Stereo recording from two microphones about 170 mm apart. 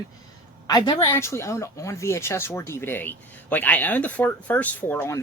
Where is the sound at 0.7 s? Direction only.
20° left (ahead or behind).